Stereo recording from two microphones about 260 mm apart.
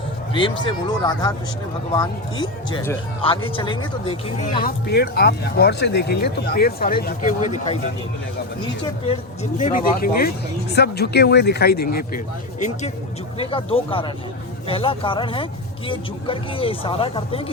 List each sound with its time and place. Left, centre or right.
0.3 s speech: centre
8.8 s speech: left